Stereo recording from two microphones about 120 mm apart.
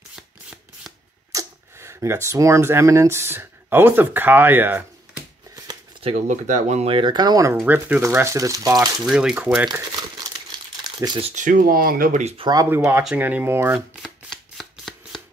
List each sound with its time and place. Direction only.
0.1 s shuffling cards: 5° right (ahead or behind)
1.3 s speech: 25° right (ahead or behind)
6.1 s speech: 90° right
6.9 s speech: 40° right (ahead or behind)
7.6 s speech: 15° right (ahead or behind); by 8.9 s 30° right (ahead or behind)
9.0 s speech: 5° right (ahead or behind)
11.1 s speech: 75° right (ahead or behind); by 11.6 s 90° right
12.1 s speech: 70° right (ahead or behind)
12.4 s speech: 35° right (ahead or behind)
12.6 s speech: 20° right (ahead or behind)
13.7 s shuffling cards: centre (ahead or behind)